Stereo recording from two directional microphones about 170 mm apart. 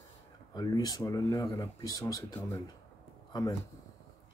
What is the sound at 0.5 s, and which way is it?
Speech, 25° left (ahead or behind).